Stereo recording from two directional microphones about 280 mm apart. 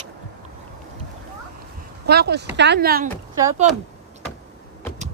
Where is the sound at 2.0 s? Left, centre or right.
Right.